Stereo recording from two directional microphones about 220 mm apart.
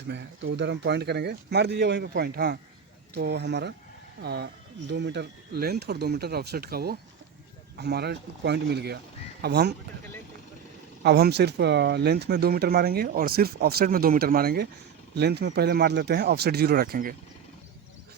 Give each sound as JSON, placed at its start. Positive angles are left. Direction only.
{"t": 0.1, "sound": "speech", "side_deg": -50}
{"t": 11.0, "sound": "speech", "side_deg": -50}